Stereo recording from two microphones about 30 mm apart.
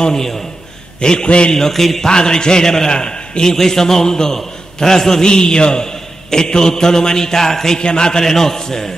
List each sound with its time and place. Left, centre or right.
0.1 s a man's voice: centre
1.0 s a man's voice: left
1.7 s a man's voice: centre
2.0 s a man's voice: left
3.5 s a man's voice: centre
5.2 s a man's voice: left
7.8 s a man's voice: left